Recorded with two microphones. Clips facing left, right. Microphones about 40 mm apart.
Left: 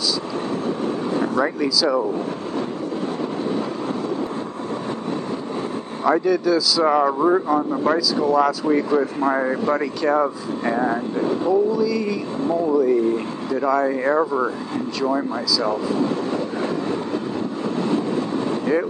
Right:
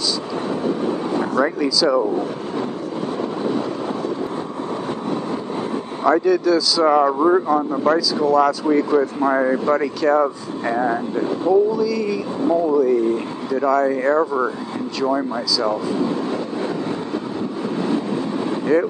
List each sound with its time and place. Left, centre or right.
1.2 s speech: centre
6.0 s a man's voice: centre
18.7 s a man's voice: centre